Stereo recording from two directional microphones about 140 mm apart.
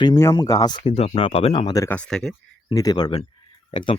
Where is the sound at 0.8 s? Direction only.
45° left (ahead or behind).